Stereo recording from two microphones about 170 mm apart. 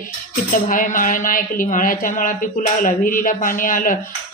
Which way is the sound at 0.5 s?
50° left (ahead or behind).